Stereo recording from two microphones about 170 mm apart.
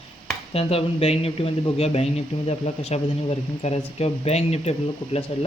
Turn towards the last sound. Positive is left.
turn(degrees=40)  # may be behind; listen again after turning